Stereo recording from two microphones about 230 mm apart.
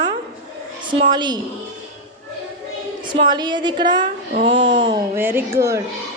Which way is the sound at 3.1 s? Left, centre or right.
Centre.